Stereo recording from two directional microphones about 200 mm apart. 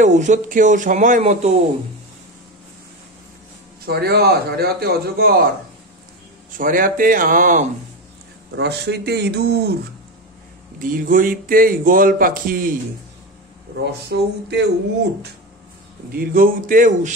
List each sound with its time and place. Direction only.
0.0 s speech: 35° right (ahead or behind)
3.8 s speech: 50° right (ahead or behind)
6.5 s speech: 45° right (ahead or behind)
8.5 s speech: 55° right (ahead or behind)
10.8 s speech: 45° right (ahead or behind)
14.0 s speech: 55° right (ahead or behind)
16.1 s speech: 45° right (ahead or behind)